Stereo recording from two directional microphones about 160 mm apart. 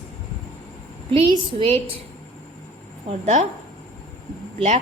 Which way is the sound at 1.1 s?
30° right (ahead or behind).